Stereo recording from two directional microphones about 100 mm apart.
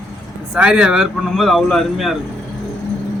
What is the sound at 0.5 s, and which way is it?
A man's voice, 10° right (ahead or behind).